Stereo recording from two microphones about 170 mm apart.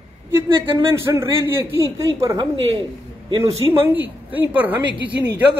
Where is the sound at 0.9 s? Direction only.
15° right (ahead or behind).